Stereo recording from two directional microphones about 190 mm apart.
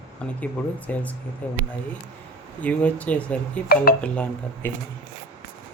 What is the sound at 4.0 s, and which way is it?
Speech, 5° left (ahead or behind).